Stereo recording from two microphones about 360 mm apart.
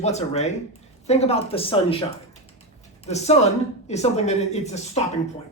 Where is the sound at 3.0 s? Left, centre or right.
Centre.